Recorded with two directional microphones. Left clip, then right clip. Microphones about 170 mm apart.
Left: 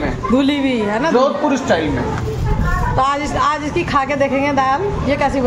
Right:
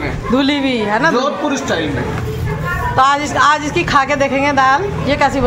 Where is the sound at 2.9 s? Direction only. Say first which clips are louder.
Right 5 dB; centre (ahead or behind).